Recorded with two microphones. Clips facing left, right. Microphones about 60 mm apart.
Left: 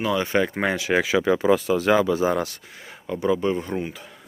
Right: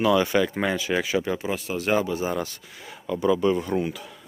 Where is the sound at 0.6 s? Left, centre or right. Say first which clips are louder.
Left 3 dB; left.